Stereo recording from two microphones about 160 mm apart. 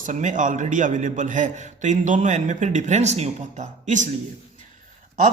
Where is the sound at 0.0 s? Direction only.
50° right (ahead or behind).